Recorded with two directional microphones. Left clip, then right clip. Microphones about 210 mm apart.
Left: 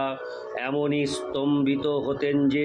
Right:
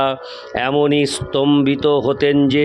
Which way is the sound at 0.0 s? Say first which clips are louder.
Right 10 dB; 50° right (ahead or behind).